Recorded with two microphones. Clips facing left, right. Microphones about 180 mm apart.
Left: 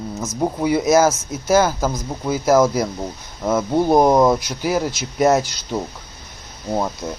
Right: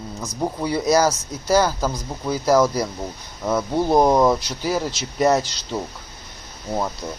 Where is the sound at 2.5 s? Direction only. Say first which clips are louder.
Left 2 dB; 20° left (ahead or behind).